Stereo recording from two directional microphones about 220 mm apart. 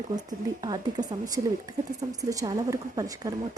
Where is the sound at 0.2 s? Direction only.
20° right (ahead or behind).